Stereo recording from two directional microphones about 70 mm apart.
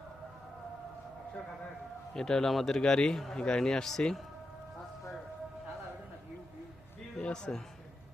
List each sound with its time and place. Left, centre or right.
2.1 s speech: centre
7.2 s a man's voice: centre